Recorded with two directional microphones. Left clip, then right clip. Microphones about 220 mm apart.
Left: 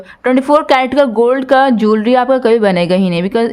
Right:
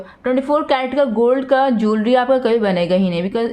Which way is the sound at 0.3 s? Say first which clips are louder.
Left 6 dB; 35° left (ahead or behind).